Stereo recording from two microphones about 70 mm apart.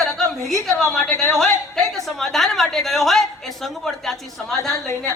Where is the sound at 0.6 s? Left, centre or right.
Centre.